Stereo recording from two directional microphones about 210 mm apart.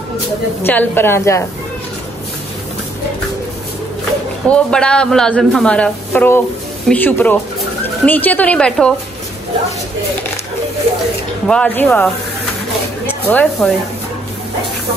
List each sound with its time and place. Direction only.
0.7 s a woman's voice: 10° left (ahead or behind)
4.5 s a woman's voice: 5° left (ahead or behind)
11.4 s a woman's voice: 5° left (ahead or behind)